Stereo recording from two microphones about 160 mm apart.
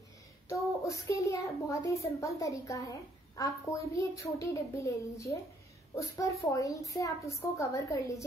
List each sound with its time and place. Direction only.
0.8 s a child's voice: 20° left (ahead or behind)